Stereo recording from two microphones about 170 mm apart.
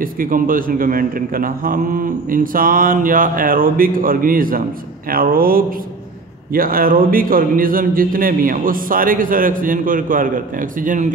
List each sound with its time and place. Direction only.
0.0 s a man's voice: 55° right (ahead or behind)